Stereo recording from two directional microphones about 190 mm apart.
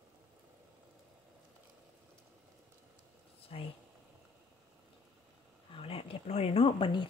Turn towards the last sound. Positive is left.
turn(degrees=25)  # may be behind; listen again after turning